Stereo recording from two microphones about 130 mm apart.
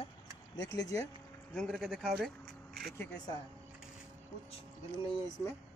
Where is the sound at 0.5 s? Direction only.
25° left (ahead or behind).